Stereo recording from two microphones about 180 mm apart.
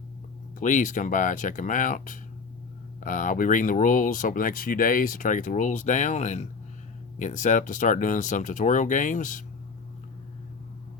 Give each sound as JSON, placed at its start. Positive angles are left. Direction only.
{"t": 0.6, "sound": "speech", "side_deg": 45}